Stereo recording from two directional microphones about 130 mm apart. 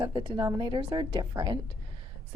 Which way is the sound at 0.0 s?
35° right (ahead or behind).